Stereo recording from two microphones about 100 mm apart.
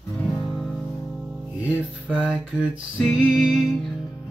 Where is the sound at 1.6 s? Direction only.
15° right (ahead or behind).